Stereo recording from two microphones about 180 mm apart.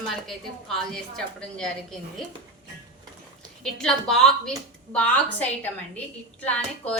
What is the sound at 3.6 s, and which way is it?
A woman's voice, centre (ahead or behind).